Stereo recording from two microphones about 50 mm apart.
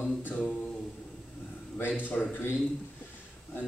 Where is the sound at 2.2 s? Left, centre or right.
Centre.